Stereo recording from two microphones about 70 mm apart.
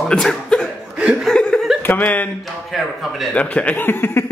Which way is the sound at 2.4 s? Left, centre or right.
Centre.